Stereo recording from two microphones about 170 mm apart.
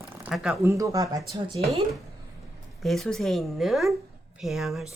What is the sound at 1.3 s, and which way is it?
Speech, 35° right (ahead or behind).